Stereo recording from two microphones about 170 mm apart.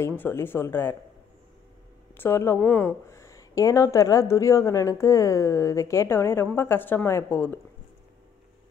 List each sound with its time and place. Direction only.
0.2 s speech: 10° left (ahead or behind)
2.1 s speech: 15° left (ahead or behind)